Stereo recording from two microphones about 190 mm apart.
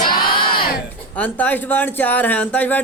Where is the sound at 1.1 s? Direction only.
10° left (ahead or behind).